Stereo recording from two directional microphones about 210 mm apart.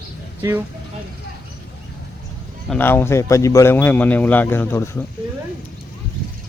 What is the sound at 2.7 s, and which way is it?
Speech, 10° left (ahead or behind).